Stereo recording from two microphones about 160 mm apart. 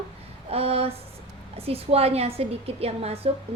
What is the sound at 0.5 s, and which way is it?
A woman's voice, 40° right (ahead or behind).